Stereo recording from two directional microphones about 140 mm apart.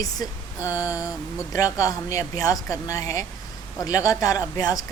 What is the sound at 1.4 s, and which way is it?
Speech, 25° left (ahead or behind).